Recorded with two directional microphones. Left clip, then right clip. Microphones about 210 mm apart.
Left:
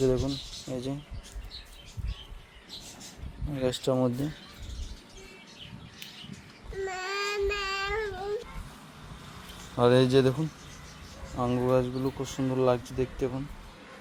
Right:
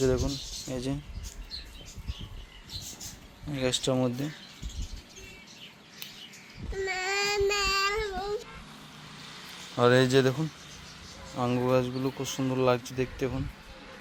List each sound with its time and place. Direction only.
0.0 s speech: centre (ahead or behind)
3.5 s speech: 15° left (ahead or behind)
6.8 s child singing: 15° right (ahead or behind)
9.7 s speech: centre (ahead or behind)
11.3 s speech: 5° right (ahead or behind)